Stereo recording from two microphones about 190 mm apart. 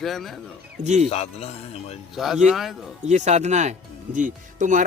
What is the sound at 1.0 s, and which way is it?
Speech, 35° left (ahead or behind).